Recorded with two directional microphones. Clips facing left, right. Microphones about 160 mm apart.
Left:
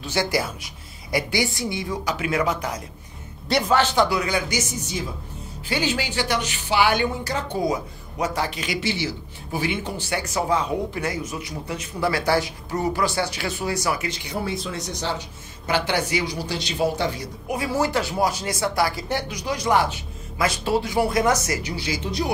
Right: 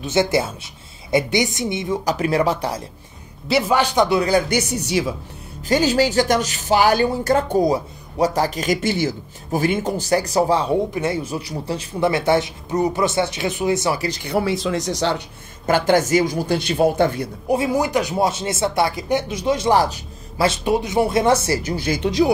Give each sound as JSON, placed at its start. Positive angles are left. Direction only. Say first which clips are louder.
{"t": 0.0, "sound": "speech", "louder": "right 5 dB", "side_deg": -20}
{"t": 2.0, "sound": "speech", "louder": "right 5 dB", "side_deg": -40}
{"t": 3.4, "sound": "a man's voice", "louder": "right 3 dB", "side_deg": -5}
{"t": 3.7, "sound": "speech", "louder": "right 2 dB", "side_deg": -15}
{"t": 4.5, "sound": "speech", "louder": "right 6 dB", "side_deg": -65}
{"t": 5.7, "sound": "speech", "louder": "right 8 dB", "side_deg": -40}
{"t": 14.2, "sound": "speech", "louder": "right 7 dB", "side_deg": -75}
{"t": 15.6, "sound": "speech", "louder": "right 7 dB", "side_deg": -45}
{"t": 17.7, "sound": "speech", "louder": "right 3 dB", "side_deg": -15}
{"t": 19.8, "sound": "a sound", "louder": "right 4 dB", "side_deg": -40}
{"t": 20.4, "sound": "speech", "louder": "right 3 dB", "side_deg": -20}
{"t": 21.6, "sound": "speech", "louder": "right 7 dB", "side_deg": -50}